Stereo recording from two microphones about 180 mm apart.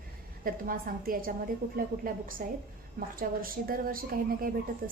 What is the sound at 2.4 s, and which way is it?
A woman's voice, 55° right (ahead or behind).